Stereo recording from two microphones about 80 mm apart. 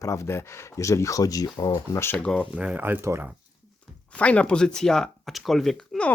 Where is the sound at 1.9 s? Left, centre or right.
Left.